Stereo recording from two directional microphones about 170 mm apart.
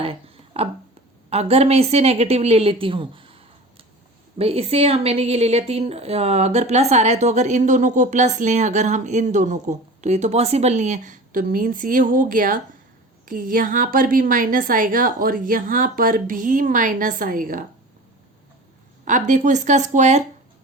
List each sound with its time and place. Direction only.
0.0 s a sound: 35° right (ahead or behind)
1.3 s a woman's voice: 35° right (ahead or behind); by 17.6 s 55° right (ahead or behind)
19.0 s a woman's voice: 50° right (ahead or behind)